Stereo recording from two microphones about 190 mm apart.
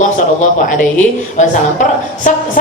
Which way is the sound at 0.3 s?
40° left (ahead or behind).